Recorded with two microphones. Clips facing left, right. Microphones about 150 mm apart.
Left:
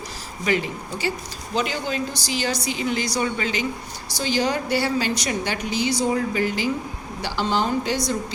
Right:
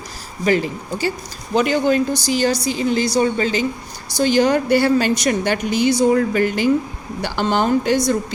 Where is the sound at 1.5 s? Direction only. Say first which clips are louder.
Right 9 dB; 55° right (ahead or behind).